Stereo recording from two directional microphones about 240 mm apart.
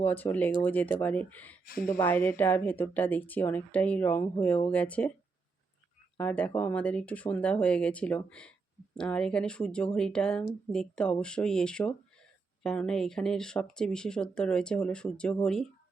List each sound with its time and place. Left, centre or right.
0.0 s speech: centre
1.6 s speech: left
1.9 s speech: centre
6.1 s speech: centre